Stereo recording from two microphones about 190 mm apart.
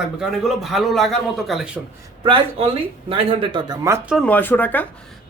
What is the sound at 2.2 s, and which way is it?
Speech, 25° right (ahead or behind).